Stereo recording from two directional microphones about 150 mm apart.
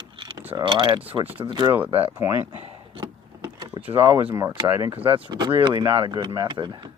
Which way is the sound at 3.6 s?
40° right (ahead or behind).